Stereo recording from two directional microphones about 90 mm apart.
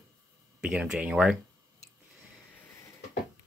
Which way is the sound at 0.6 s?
10° right (ahead or behind).